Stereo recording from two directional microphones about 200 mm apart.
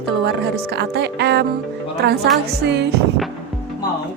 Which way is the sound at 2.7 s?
55° right (ahead or behind).